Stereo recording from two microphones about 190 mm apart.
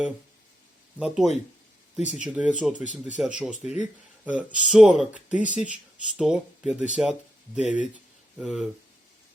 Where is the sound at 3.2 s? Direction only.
5° right (ahead or behind).